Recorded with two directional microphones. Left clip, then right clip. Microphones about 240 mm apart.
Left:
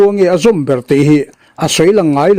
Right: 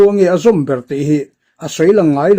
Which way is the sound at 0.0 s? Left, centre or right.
Left.